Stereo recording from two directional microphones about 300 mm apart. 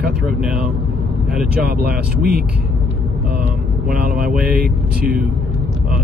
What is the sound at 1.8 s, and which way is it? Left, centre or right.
Speech, right.